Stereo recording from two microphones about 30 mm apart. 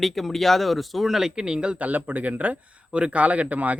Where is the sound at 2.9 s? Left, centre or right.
Right.